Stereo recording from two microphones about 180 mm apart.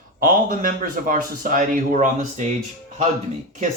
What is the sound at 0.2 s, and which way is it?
Speech, 50° right (ahead or behind).